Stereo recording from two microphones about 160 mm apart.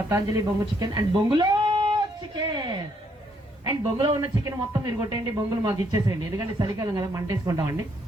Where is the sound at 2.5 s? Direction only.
30° right (ahead or behind).